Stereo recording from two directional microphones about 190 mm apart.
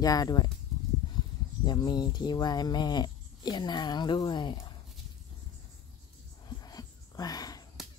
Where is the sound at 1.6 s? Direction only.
25° left (ahead or behind).